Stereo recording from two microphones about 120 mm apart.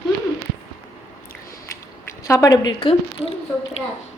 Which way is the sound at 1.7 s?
25° left (ahead or behind).